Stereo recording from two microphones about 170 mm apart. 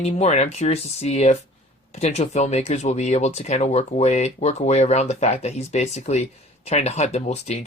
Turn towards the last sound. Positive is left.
turn(degrees=40)  # may be behind; listen again after turning